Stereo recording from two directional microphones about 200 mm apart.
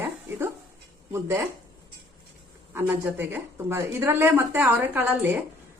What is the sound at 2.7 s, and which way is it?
A woman's voice, 10° right (ahead or behind).